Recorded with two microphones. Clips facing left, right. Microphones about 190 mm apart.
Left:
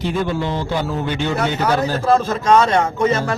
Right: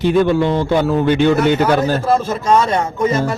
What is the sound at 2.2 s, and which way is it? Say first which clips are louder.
Speech: even; 10° right (ahead or behind).